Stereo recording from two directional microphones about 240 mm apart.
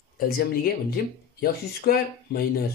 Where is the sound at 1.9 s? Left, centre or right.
Left.